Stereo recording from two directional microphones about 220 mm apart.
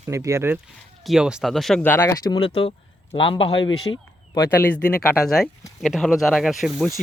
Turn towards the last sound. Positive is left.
turn(degrees=0)  # may be behind; listen again after turning